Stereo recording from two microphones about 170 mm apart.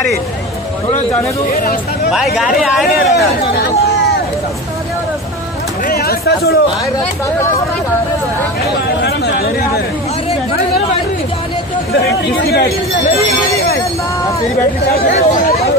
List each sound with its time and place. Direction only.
2.0 s speech: 5° right (ahead or behind)
3.5 s chatter: 75° left (ahead or behind)
5.9 s a sound: 65° left (ahead or behind)
9.0 s a sound: 70° left (ahead or behind)
11.9 s speech: 75° left (ahead or behind)
15.0 s speech: 45° left (ahead or behind)